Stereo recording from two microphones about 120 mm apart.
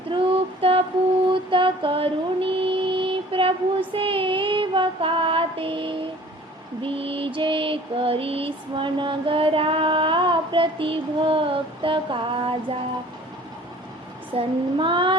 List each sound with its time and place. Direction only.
0.1 s music: 50° right (ahead or behind)
1.3 s mantra: 45° right (ahead or behind)
14.3 s mantra: 45° right (ahead or behind)